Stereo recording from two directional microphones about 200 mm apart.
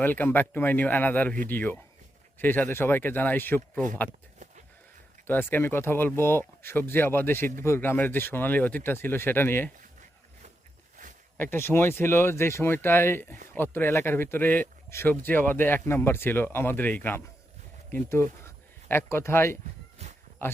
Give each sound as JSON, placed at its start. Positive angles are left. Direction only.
{"t": 0.0, "sound": "speech", "side_deg": 10}
{"t": 5.2, "sound": "speech", "side_deg": 10}
{"t": 11.5, "sound": "speech", "side_deg": 10}
{"t": 20.0, "sound": "cat", "side_deg": -35}